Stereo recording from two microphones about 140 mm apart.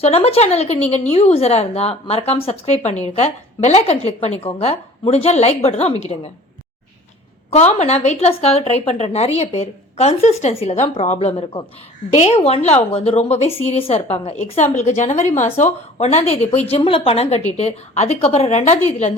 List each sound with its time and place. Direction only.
0.0 s a woman's voice: 45° left (ahead or behind)
7.5 s a woman's voice: 50° left (ahead or behind)